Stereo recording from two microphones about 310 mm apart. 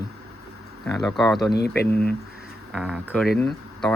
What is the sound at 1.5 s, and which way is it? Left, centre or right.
Speech, left.